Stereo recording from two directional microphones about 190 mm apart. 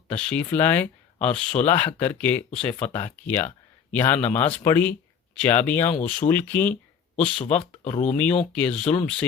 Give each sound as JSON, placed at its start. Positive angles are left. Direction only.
{"t": 0.1, "sound": "speech", "side_deg": 5}
{"t": 7.6, "sound": "speech", "side_deg": 30}
{"t": 8.1, "sound": "speech", "side_deg": 5}